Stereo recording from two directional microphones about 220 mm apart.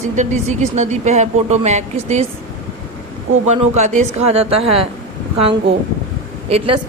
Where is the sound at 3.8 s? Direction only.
30° right (ahead or behind).